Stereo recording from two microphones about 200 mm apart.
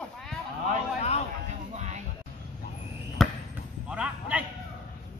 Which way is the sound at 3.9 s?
5° right (ahead or behind).